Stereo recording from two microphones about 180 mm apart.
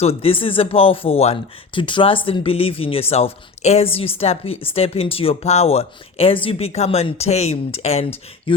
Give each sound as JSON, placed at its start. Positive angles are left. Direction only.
{"t": 0.0, "sound": "speech", "side_deg": 30}